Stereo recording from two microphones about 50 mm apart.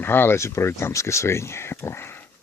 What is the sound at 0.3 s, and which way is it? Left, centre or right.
Speech, left.